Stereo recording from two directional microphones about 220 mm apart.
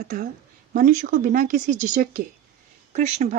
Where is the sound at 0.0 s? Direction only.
40° right (ahead or behind).